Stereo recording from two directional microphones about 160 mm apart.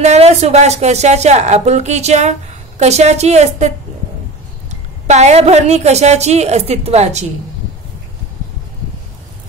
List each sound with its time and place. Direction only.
0.0 s a woman's voice: 45° right (ahead or behind)